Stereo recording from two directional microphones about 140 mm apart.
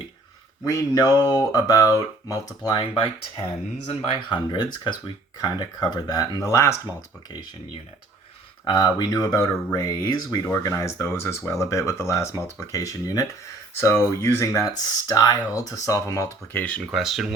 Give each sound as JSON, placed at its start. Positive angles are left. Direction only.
{"t": 0.6, "sound": "speech", "side_deg": 20}
{"t": 8.6, "sound": "speech", "side_deg": 30}